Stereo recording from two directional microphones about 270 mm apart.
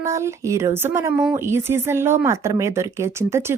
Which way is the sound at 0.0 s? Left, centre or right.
Centre.